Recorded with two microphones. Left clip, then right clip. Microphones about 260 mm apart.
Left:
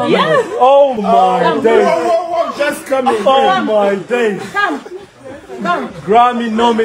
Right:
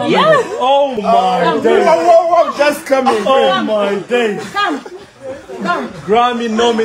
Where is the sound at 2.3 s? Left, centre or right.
Centre.